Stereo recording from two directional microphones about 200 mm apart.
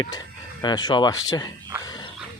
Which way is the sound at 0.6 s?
20° left (ahead or behind).